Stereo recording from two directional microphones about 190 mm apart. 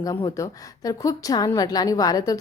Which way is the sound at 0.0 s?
20° left (ahead or behind).